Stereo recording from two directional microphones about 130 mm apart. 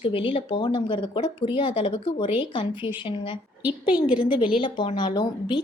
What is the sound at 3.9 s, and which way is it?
Speech, 10° right (ahead or behind).